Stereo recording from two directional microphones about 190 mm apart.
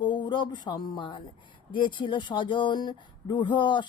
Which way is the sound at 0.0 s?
25° left (ahead or behind).